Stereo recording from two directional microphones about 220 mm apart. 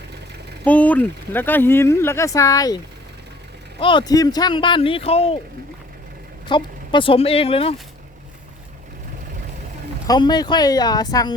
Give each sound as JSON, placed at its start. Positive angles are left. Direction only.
{"t": 0.6, "sound": "speech", "side_deg": 5}
{"t": 6.5, "sound": "speech", "side_deg": 20}
{"t": 10.1, "sound": "speech", "side_deg": 20}